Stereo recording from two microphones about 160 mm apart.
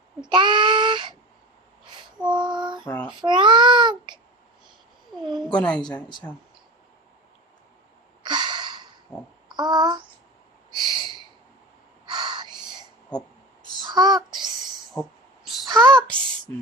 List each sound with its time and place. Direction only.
0.2 s child singing: 30° right (ahead or behind)
2.3 s child singing: 30° right (ahead or behind)
2.8 s child singing: 10° left (ahead or behind)
3.2 s babbling: 30° right (ahead or behind)
5.3 s cat: 5° left (ahead or behind)
8.2 s a sound: 30° right (ahead or behind)
9.1 s a sound: 25° left (ahead or behind)
9.5 s child singing: 25° right (ahead or behind)
10.8 s owl: 30° right (ahead or behind)
12.0 s crow: 25° right (ahead or behind)
12.6 s whispering: 5° right (ahead or behind)
13.8 s a sound: 25° right (ahead or behind)
15.9 s a sound: 5° left (ahead or behind)